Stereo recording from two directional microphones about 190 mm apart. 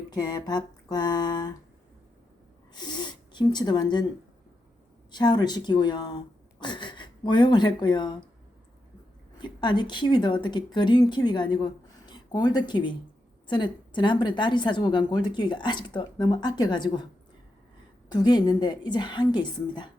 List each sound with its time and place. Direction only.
0.1 s a woman's voice: 20° left (ahead or behind)
2.7 s speech: 25° left (ahead or behind)
5.1 s a woman's voice: 25° left (ahead or behind)
9.4 s a woman's voice: 25° left (ahead or behind)
18.1 s a woman's voice: 20° left (ahead or behind)